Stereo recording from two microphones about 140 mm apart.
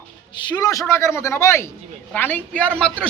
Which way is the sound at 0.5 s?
25° left (ahead or behind).